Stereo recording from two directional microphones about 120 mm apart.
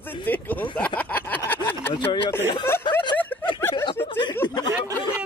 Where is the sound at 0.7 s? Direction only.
10° left (ahead or behind).